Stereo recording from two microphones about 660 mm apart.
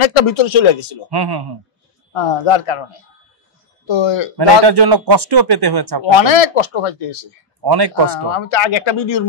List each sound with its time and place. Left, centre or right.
0.0 s speech: left
1.1 s a man's voice: right
2.1 s speech: left
4.4 s a man's voice: right
6.1 s speech: left
7.6 s a man's voice: right
8.3 s speech: left